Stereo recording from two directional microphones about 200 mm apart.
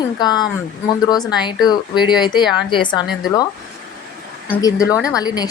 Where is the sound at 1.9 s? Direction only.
Centre (ahead or behind).